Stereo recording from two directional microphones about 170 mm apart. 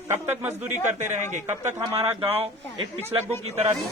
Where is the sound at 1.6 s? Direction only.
15° right (ahead or behind).